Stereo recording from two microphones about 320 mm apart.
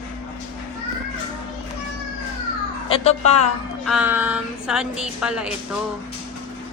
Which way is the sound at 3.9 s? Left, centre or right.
Centre.